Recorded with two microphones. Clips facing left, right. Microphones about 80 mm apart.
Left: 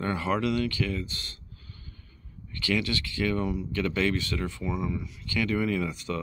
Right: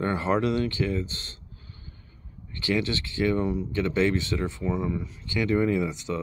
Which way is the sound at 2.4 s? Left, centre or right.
Right.